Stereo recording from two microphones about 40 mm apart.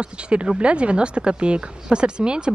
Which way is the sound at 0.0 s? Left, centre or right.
Right.